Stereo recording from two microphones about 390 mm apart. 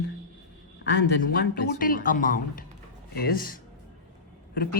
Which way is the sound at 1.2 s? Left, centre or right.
Left.